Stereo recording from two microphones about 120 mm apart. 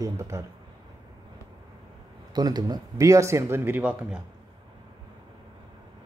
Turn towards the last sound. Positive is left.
turn(degrees=-10)  # may be behind; listen again after turning